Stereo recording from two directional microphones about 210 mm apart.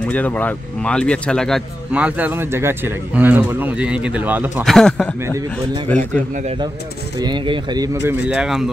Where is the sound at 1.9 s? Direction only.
5° right (ahead or behind).